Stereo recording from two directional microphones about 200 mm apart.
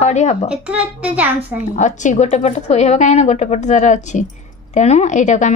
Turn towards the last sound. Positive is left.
turn(degrees=35)  # may be behind; listen again after turning